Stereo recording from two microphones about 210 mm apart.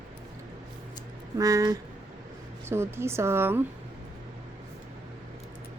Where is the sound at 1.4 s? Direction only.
15° right (ahead or behind).